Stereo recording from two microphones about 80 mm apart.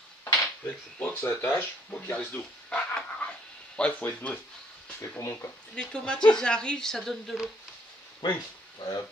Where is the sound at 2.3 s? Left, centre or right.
Centre.